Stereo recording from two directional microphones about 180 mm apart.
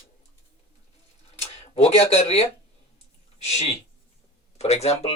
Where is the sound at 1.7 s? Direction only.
35° left (ahead or behind).